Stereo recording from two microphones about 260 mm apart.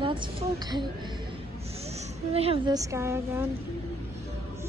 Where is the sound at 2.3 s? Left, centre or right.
Right.